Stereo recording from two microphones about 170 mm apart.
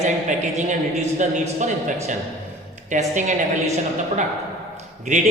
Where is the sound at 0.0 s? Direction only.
45° right (ahead or behind).